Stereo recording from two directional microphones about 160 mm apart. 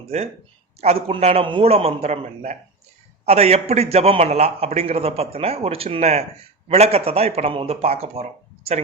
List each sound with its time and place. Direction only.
0.1 s a man's voice: 40° right (ahead or behind)